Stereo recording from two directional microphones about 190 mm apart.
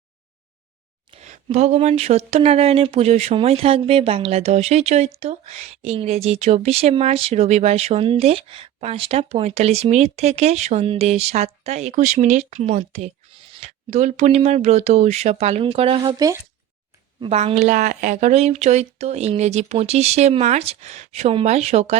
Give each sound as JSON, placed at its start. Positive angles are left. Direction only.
{"t": 1.1, "sound": "speech", "side_deg": -35}
{"t": 17.2, "sound": "speech", "side_deg": -35}